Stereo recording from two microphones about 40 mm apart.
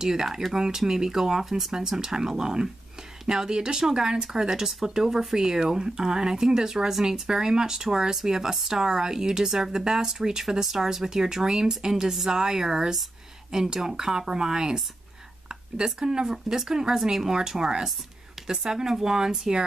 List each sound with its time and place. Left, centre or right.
0.0 s speech: centre